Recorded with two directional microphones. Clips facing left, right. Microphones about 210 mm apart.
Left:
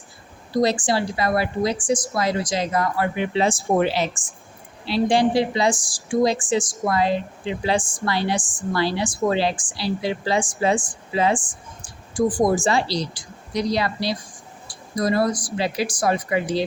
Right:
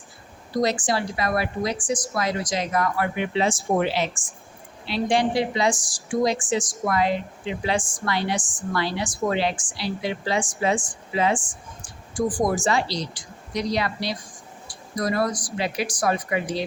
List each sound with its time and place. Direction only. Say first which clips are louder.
0.6 s a woman's voice: left 3 dB; 30° left (ahead or behind)